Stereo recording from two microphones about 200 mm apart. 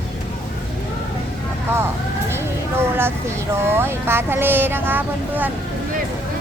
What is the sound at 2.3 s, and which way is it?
Speech, 10° right (ahead or behind).